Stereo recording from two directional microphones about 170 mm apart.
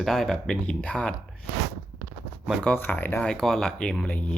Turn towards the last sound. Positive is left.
turn(degrees=10)  # may be behind; listen again after turning